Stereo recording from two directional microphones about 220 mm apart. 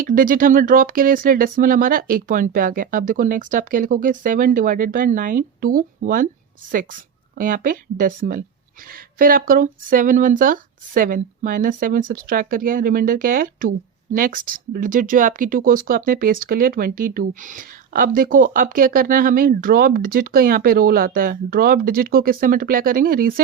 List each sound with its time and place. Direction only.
0.0 s speech: 40° right (ahead or behind)
7.3 s speech: 40° right (ahead or behind)